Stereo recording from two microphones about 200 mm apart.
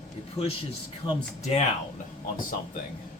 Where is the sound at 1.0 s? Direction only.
30° left (ahead or behind).